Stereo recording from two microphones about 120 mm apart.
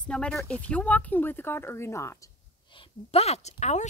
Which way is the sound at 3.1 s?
60° left (ahead or behind).